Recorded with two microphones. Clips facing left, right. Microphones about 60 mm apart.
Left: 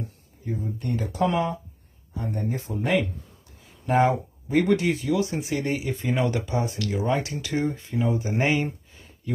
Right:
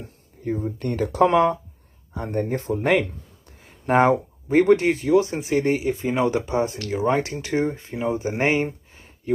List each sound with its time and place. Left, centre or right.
0.4 s speech: right
3.5 s speech: right
8.9 s a sound: right